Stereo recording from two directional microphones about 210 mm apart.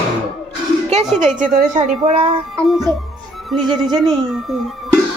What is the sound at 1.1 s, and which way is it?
A woman's voice, 35° right (ahead or behind).